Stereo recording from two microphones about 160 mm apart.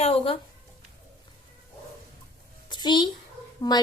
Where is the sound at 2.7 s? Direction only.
25° left (ahead or behind).